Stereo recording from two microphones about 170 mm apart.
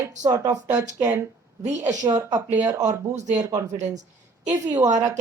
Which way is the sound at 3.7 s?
45° right (ahead or behind).